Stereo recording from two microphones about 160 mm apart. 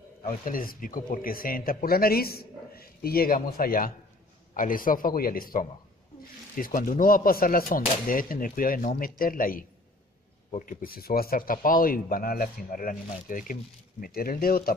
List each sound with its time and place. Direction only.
0.3 s speech: 60° left (ahead or behind)